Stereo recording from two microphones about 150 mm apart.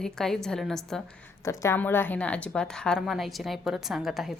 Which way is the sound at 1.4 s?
20° left (ahead or behind).